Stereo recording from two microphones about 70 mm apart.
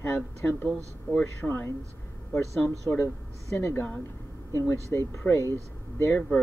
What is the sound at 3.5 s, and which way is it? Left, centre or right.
Speech, left.